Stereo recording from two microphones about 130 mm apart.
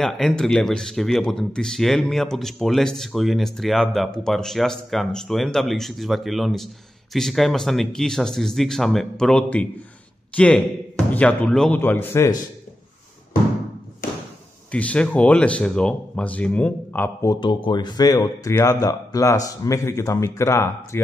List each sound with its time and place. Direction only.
0.0 s speech: 5° left (ahead or behind)
14.7 s speech: 10° left (ahead or behind)
17.4 s speech: 40° left (ahead or behind); by 21.0 s 20° left (ahead or behind)